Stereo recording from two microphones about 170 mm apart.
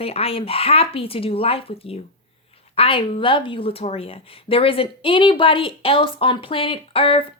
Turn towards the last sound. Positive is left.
turn(degrees=35)  # may be behind; listen again after turning